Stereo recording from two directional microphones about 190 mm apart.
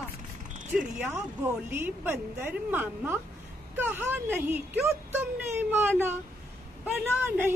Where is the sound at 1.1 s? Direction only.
10° right (ahead or behind).